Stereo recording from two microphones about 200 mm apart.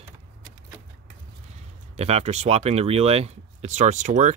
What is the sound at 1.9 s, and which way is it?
Speech, 30° right (ahead or behind).